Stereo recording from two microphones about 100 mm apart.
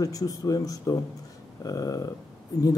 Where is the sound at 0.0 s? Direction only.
35° left (ahead or behind).